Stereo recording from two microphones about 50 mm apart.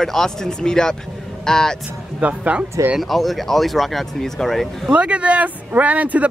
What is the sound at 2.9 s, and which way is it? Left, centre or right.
Speech, centre.